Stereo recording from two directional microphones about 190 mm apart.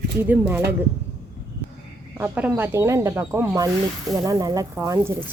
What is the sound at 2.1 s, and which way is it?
Speech, 10° right (ahead or behind).